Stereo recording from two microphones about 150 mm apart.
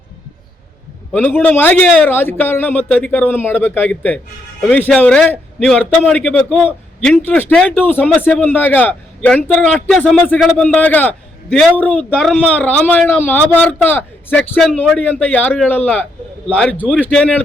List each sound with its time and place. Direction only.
1.1 s a man's voice: 10° left (ahead or behind)